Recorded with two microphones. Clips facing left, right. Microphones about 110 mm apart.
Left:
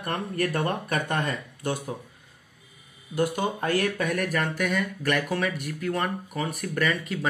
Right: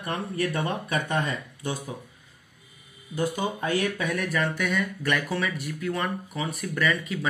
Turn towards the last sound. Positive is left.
turn(degrees=45)  # may be behind; listen again after turning